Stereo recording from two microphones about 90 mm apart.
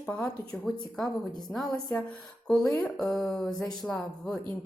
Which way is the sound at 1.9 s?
15° left (ahead or behind).